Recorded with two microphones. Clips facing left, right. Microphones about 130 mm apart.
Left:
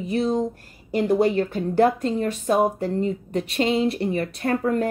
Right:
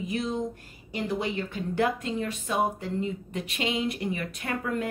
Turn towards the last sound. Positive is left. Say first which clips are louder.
# left 8 dB
turn(degrees=35)  # may be behind; listen again after turning